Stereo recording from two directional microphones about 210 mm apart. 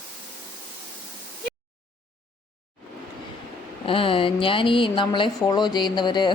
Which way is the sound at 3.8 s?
25° left (ahead or behind).